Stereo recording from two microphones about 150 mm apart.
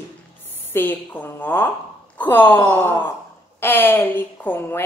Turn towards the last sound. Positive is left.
turn(degrees=15)  # may be behind; listen again after turning